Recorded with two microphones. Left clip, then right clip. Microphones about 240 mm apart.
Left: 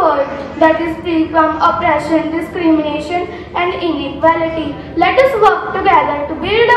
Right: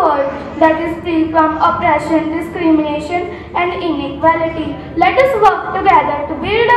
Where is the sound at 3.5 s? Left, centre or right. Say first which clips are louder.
Even; right.